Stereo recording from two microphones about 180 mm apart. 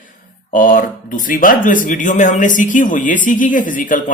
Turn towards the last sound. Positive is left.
turn(degrees=45)  # may be behind; listen again after turning